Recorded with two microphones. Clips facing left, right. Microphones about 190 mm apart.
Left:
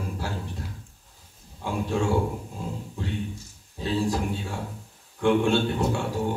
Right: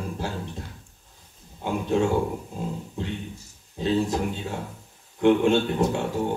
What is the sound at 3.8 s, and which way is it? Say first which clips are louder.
A man's voice: right 2 dB; 20° right (ahead or behind).